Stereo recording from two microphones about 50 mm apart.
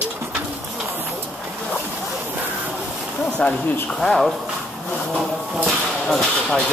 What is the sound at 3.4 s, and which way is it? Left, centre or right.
Speech, centre.